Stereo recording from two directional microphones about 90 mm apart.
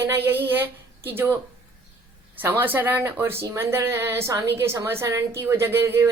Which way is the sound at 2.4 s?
20° right (ahead or behind).